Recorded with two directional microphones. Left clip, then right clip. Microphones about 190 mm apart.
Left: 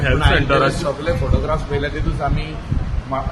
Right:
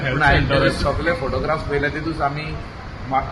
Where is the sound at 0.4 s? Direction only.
55° left (ahead or behind).